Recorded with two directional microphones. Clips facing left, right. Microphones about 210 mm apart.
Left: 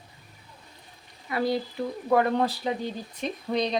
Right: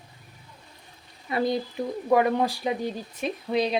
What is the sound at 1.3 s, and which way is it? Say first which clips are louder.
Speech: right 1 dB; 20° right (ahead or behind).